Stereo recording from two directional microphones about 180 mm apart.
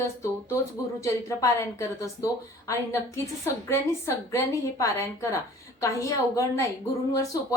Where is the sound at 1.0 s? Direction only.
15° left (ahead or behind).